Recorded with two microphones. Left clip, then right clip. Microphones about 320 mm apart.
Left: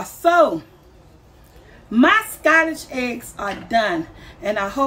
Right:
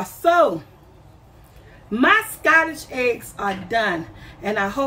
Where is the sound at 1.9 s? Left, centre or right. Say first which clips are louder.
Left 1 dB; centre.